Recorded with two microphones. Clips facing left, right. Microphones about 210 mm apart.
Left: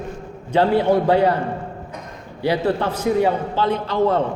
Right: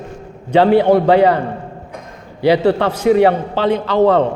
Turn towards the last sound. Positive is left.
turn(degrees=-75)  # may be behind; listen again after turning